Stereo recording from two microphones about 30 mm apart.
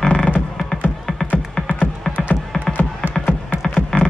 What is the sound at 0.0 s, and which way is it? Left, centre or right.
Music, left.